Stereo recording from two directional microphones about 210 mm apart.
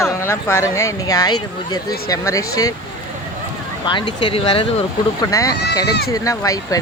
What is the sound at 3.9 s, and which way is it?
Speech, 25° left (ahead or behind).